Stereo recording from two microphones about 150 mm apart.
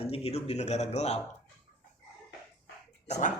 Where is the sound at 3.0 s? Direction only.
50° left (ahead or behind).